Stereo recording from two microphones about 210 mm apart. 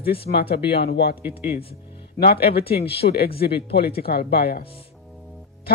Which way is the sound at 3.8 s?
45° left (ahead or behind).